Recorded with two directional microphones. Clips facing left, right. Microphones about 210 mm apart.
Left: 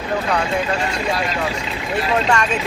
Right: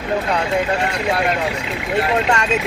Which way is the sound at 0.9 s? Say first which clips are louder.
Right 3 dB; 60° right (ahead or behind).